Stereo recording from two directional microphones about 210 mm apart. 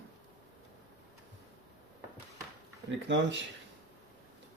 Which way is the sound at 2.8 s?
60° right (ahead or behind).